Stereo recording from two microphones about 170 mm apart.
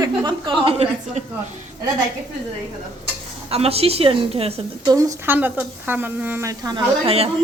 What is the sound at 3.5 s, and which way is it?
A woman's voice, 35° right (ahead or behind).